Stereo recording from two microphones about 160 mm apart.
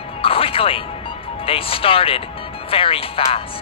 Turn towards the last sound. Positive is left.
turn(degrees=35)  # may be behind; listen again after turning